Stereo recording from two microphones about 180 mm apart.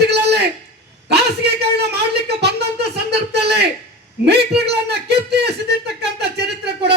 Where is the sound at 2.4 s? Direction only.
65° right (ahead or behind).